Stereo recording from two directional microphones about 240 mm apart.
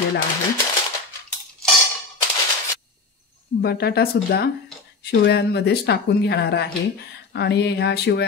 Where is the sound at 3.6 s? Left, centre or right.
Left.